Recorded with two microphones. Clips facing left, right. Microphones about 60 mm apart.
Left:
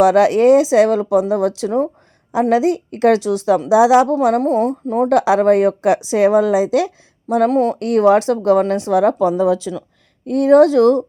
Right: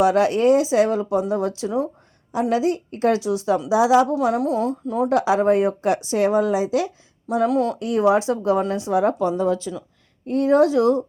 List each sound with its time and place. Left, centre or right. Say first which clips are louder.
0.0 s speech: left 6 dB; left
3.7 s speech: left 5 dB; left
4.4 s a woman's voice: left 5 dB; left
5.0 s speech: left 5 dB; left
6.3 s speech: left 6 dB; left
7.4 s a woman's voice: left 5 dB; left
7.8 s a woman's voice: left 7 dB; left